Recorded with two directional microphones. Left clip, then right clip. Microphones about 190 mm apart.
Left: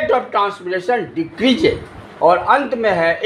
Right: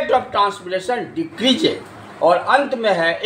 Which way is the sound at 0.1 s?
35° left (ahead or behind).